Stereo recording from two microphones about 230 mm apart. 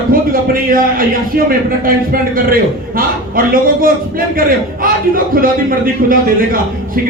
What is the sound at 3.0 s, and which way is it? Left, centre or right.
A man's voice, right.